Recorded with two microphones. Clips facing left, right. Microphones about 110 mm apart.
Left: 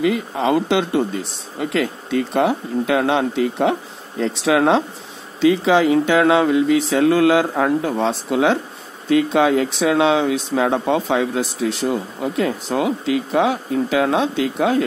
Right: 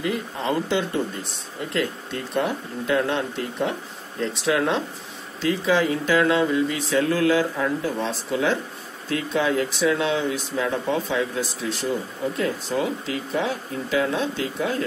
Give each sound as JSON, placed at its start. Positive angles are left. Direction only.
{"t": 0.0, "sound": "speech", "side_deg": 90}
{"t": 9.1, "sound": "speech", "side_deg": 90}